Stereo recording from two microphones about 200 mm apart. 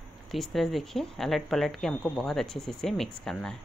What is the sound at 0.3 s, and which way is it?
Speech, centre (ahead or behind).